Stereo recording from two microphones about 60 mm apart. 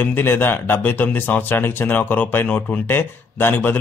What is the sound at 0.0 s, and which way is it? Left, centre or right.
A man's voice, left.